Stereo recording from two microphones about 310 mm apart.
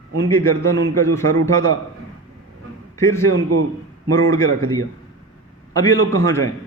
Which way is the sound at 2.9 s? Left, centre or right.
Centre.